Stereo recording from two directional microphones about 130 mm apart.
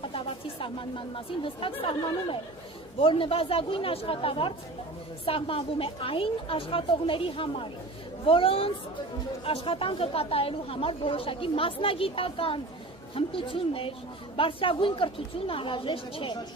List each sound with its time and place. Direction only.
0.0 s a woman's voice: 45° left (ahead or behind)